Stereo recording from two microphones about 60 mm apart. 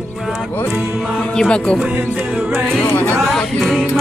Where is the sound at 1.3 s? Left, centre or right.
Centre.